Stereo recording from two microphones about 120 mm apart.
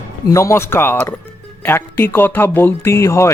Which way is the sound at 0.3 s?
25° left (ahead or behind).